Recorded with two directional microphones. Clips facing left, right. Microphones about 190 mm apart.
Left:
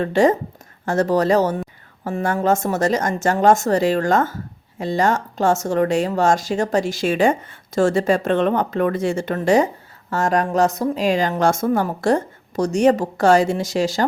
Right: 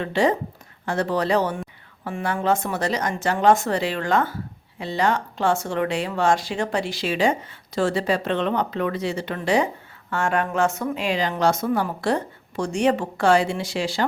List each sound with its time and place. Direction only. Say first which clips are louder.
0.0 s speech: left 5 dB; 45° left (ahead or behind)